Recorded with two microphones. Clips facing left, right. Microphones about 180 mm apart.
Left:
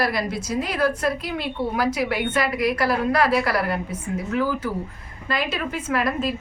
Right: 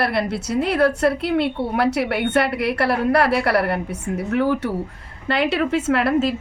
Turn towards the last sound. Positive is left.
turn(degrees=-70)  # may be behind; listen again after turning